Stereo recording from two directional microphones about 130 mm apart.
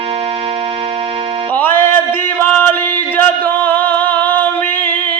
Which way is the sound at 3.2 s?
15° left (ahead or behind).